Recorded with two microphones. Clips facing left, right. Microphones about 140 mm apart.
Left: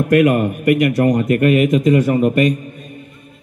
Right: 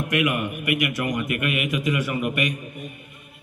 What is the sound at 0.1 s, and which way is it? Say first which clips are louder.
A man's voice: left 11 dB; 45° left (ahead or behind).